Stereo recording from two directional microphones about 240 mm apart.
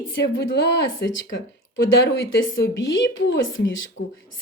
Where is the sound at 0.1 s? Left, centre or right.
Left.